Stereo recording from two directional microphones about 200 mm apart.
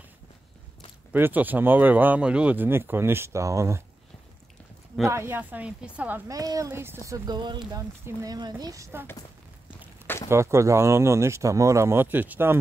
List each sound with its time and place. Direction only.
1.1 s speech: 10° right (ahead or behind)
5.0 s speech: 15° right (ahead or behind)
10.3 s speech: 15° right (ahead or behind)